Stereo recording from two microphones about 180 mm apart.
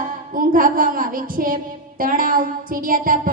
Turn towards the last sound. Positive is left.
turn(degrees=-50)  # may be behind; listen again after turning